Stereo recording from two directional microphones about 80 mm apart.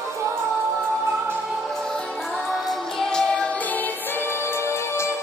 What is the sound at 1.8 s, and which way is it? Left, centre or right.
Music, centre.